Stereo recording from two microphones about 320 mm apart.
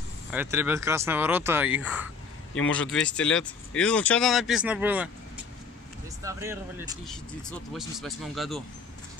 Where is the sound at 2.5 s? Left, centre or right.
Left.